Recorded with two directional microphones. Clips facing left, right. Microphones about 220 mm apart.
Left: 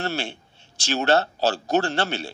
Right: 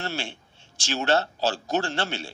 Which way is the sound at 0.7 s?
65° left (ahead or behind).